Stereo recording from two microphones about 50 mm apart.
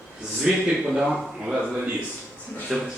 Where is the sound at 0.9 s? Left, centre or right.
Centre.